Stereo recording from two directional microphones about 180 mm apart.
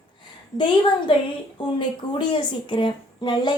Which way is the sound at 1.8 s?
25° left (ahead or behind).